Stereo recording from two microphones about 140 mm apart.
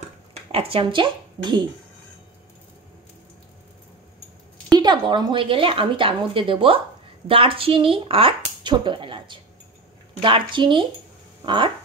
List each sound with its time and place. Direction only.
0.5 s a woman's voice: 40° right (ahead or behind)
4.6 s a woman's voice: 30° right (ahead or behind)